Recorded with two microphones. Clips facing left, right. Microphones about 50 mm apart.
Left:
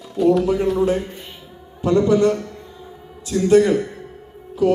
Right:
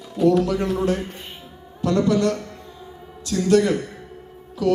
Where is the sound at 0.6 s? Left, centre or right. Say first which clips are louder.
Left 4 dB; centre.